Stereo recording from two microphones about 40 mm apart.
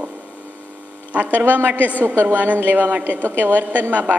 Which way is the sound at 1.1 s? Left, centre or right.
Right.